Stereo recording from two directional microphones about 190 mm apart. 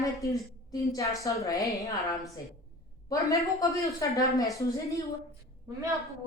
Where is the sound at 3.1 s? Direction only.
15° left (ahead or behind).